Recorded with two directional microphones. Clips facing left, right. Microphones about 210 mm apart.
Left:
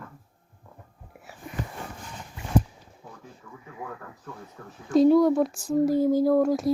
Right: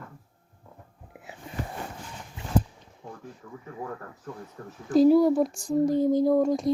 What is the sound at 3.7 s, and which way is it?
Speech, 40° right (ahead or behind).